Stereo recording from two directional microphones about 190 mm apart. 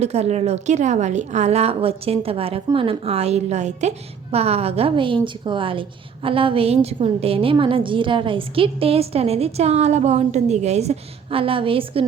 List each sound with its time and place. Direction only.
0.0 s a woman's voice: 35° right (ahead or behind)